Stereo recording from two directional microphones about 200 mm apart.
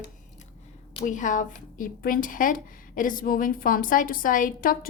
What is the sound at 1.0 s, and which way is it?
A woman's voice, 40° left (ahead or behind).